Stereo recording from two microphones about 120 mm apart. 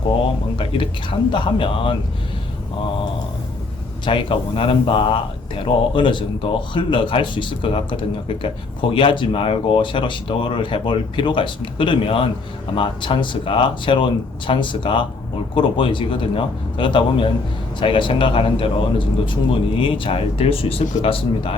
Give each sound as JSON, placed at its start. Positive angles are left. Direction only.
{"t": 0.5, "sound": "speech", "side_deg": 45}
{"t": 4.0, "sound": "speech", "side_deg": 45}